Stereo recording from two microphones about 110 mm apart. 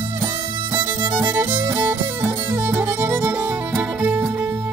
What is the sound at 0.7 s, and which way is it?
Music, 30° right (ahead or behind).